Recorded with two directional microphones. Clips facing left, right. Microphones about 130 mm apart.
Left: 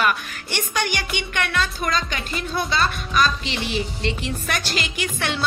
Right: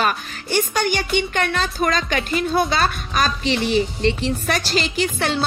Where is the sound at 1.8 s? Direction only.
50° right (ahead or behind).